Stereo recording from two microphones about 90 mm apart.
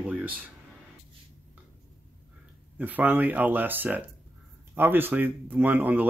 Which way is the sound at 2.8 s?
20° right (ahead or behind).